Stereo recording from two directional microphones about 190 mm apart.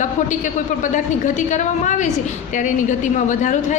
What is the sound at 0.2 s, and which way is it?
A woman's voice, 40° left (ahead or behind).